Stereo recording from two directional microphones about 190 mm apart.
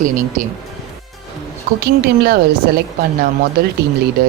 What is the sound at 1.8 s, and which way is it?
Speech, 55° right (ahead or behind).